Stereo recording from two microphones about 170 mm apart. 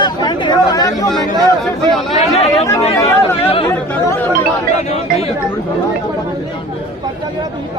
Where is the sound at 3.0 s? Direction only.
15° left (ahead or behind).